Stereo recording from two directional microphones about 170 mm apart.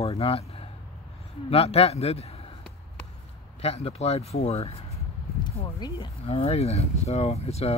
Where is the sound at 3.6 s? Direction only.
35° left (ahead or behind).